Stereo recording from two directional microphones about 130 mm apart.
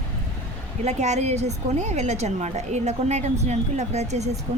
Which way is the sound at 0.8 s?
60° right (ahead or behind).